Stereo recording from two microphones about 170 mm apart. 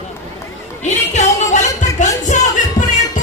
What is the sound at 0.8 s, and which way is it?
Music, 45° left (ahead or behind).